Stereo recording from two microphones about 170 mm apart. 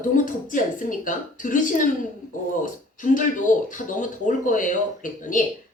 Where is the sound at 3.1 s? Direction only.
50° left (ahead or behind).